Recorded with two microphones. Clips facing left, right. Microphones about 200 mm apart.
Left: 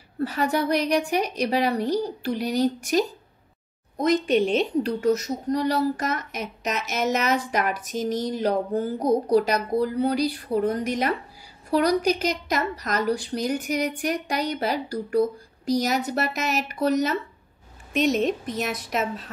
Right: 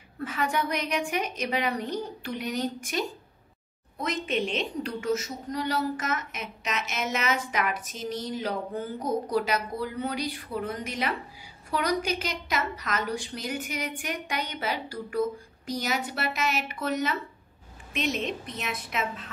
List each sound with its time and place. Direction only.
0.2 s a child's voice: 35° left (ahead or behind)
4.4 s a child's voice: 40° left (ahead or behind)